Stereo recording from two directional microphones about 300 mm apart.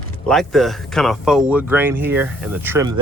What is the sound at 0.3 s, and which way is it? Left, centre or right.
Speech, centre.